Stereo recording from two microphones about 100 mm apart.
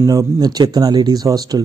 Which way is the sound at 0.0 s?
35° right (ahead or behind).